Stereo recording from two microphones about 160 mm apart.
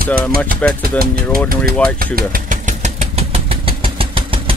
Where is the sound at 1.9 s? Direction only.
65° right (ahead or behind).